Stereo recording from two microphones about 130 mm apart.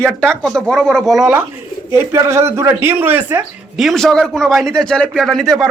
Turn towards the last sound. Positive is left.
turn(degrees=0)  # may be behind; listen again after turning